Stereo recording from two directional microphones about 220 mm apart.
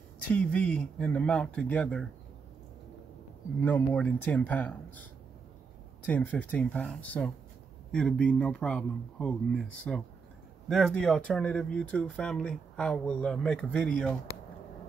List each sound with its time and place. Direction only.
0.3 s speech: 5° left (ahead or behind)
3.6 s speech: 5° left (ahead or behind)
6.0 s speech: 5° left (ahead or behind)